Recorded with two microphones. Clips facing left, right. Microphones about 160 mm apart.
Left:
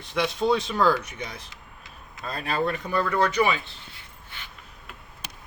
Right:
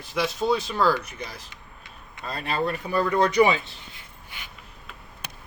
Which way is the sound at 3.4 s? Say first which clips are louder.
Right 4 dB; 20° right (ahead or behind).